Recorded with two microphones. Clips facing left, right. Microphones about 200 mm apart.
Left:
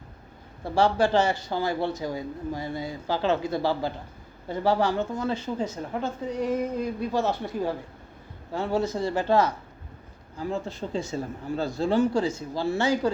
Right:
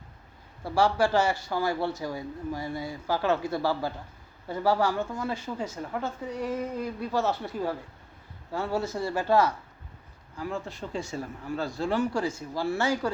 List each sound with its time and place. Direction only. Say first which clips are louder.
0.6 s speech: left 2 dB; 20° left (ahead or behind)